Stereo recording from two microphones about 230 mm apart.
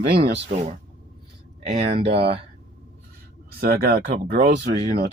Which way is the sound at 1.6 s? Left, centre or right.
Right.